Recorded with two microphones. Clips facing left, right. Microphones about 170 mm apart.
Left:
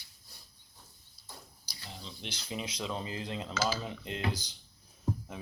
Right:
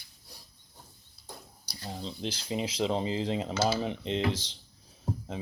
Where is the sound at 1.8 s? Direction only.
30° right (ahead or behind).